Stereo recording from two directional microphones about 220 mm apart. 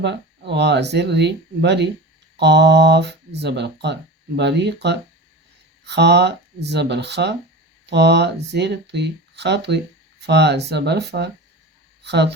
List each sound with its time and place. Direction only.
0.0 s speech: 50° right (ahead or behind)